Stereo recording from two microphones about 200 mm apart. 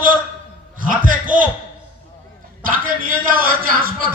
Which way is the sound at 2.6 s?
45° right (ahead or behind).